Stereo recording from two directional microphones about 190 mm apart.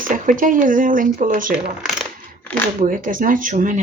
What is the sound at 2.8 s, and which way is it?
Speech, 45° right (ahead or behind).